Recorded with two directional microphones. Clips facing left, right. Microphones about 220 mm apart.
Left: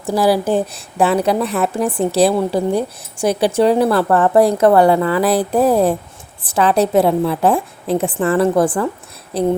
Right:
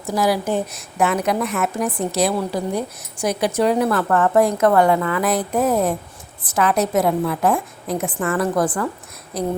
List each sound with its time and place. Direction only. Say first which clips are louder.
0.1 s a woman's voice: left 5 dB; 30° left (ahead or behind)